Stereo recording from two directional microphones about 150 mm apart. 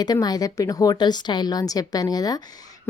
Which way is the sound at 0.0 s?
25° left (ahead or behind).